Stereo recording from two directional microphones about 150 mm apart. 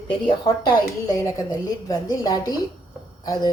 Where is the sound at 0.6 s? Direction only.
25° left (ahead or behind).